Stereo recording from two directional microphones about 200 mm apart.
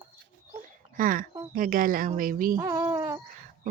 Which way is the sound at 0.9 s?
45° right (ahead or behind).